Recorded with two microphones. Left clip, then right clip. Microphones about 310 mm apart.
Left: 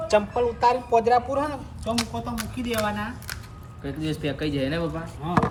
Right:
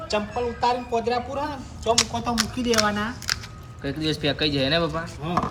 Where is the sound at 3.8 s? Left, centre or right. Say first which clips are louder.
Right 4 dB; right.